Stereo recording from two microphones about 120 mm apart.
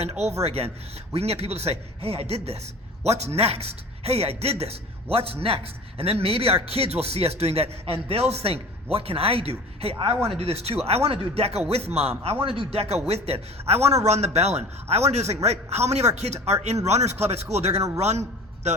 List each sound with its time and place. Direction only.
0.0 s a man's voice: 60° right (ahead or behind)